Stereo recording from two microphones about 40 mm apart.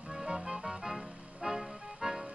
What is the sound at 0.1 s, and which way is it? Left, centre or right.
Music, centre.